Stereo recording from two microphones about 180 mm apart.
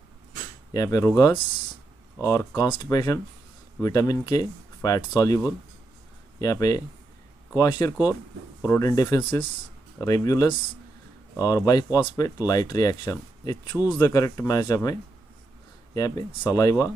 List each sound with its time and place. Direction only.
0.7 s speech: 15° left (ahead or behind)
6.4 s speech: 20° left (ahead or behind)